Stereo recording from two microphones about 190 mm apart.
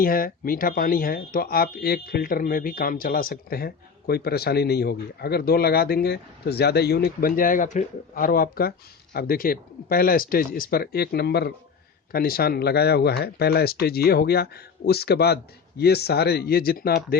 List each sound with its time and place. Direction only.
0.0 s speech: 50° left (ahead or behind)